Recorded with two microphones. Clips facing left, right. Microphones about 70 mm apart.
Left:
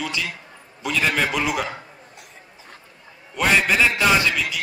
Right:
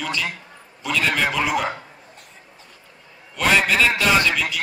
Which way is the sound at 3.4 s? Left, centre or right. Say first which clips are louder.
Even; centre.